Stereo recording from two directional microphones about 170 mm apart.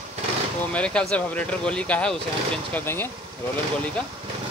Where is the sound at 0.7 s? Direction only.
5° left (ahead or behind).